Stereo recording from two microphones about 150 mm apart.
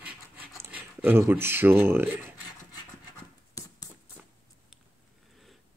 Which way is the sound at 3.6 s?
20° left (ahead or behind).